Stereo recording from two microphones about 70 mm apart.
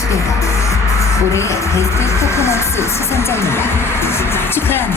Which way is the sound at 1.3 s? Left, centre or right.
Left.